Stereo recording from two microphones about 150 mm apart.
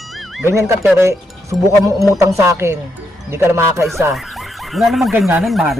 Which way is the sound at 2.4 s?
20° right (ahead or behind).